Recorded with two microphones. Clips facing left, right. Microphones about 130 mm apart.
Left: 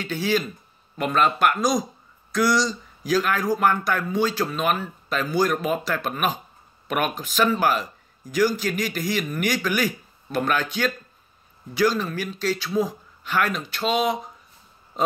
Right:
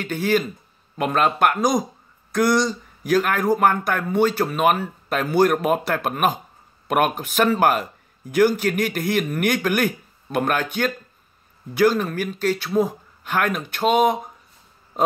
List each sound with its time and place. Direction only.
0.0 s speech: 55° right (ahead or behind)